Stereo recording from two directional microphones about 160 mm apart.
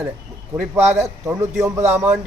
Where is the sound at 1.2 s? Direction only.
20° right (ahead or behind).